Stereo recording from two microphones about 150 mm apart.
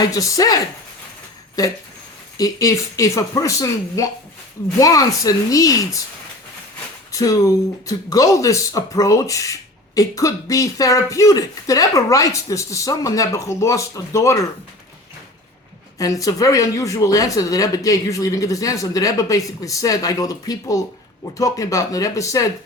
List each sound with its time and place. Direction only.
0.0 s speech: 25° left (ahead or behind)
7.1 s speech: 25° left (ahead or behind)
16.0 s speech: 20° left (ahead or behind)